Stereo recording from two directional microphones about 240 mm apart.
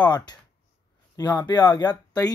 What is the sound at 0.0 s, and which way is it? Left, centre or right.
Speech, centre.